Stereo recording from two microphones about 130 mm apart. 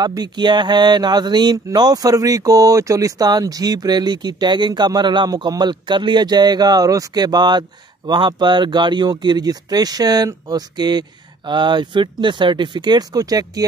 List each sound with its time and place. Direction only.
0.0 s speech: 30° right (ahead or behind)